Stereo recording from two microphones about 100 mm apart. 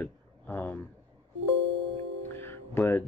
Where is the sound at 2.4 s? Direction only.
25° left (ahead or behind).